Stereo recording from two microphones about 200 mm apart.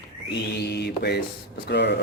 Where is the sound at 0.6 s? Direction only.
55° left (ahead or behind).